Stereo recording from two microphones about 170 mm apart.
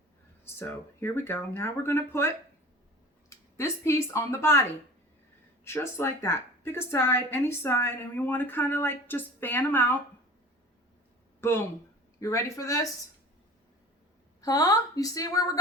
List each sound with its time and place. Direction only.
0.4 s a woman's voice: 15° left (ahead or behind)
5.6 s a woman's voice: 15° left (ahead or behind)
11.3 s a woman's voice: 15° left (ahead or behind)
14.4 s a woman's voice: 20° left (ahead or behind)